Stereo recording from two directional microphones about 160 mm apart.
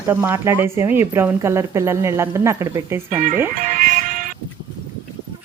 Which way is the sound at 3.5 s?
55° right (ahead or behind).